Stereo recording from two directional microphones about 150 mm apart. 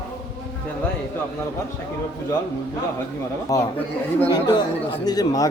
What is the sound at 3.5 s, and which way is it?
A man's voice, 20° left (ahead or behind).